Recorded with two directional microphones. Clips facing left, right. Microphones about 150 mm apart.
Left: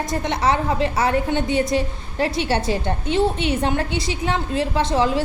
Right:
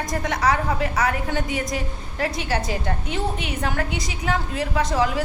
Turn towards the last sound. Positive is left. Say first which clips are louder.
# left 3 dB
turn(degrees=25)  # may be behind; listen again after turning